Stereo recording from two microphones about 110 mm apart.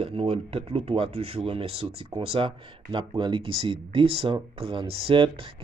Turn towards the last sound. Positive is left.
turn(degrees=-55)  # may be behind; listen again after turning